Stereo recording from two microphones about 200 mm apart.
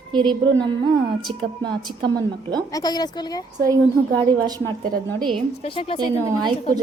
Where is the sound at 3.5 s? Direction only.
15° right (ahead or behind).